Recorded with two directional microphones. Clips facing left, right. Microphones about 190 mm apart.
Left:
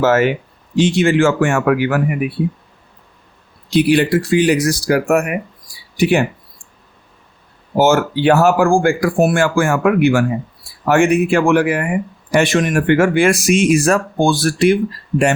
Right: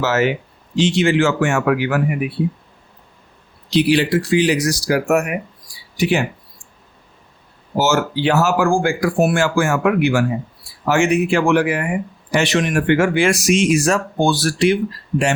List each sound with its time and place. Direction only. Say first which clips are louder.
0.0 s speech: left 4 dB; 50° left (ahead or behind)
3.7 s speech: left 2 dB; 50° left (ahead or behind)
7.8 s speech: left 4 dB; 55° left (ahead or behind)